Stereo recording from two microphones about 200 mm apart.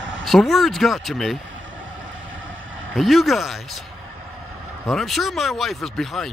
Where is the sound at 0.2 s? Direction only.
Centre (ahead or behind).